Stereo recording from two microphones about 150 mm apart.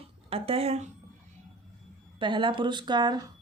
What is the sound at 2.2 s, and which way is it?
Speech, 35° right (ahead or behind).